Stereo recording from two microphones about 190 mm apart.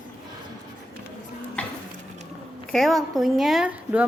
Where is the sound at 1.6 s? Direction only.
5° left (ahead or behind).